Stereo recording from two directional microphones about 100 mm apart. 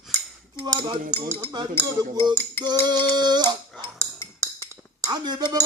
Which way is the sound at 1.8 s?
40° right (ahead or behind).